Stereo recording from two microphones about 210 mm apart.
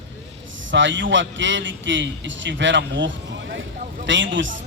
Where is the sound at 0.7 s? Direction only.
60° right (ahead or behind).